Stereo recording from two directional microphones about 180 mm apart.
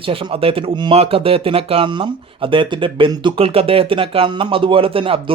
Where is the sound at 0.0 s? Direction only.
30° right (ahead or behind).